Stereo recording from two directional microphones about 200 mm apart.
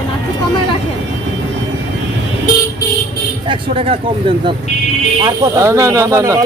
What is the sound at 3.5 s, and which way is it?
Speech, 30° right (ahead or behind).